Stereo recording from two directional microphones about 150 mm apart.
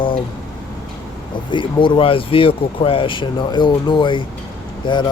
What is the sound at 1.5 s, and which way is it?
Speech, 35° left (ahead or behind).